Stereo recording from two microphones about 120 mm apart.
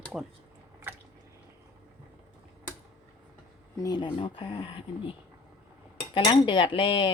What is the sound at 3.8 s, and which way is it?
Speech, 35° left (ahead or behind).